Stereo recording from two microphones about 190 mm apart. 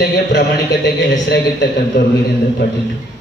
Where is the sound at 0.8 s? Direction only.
65° left (ahead or behind).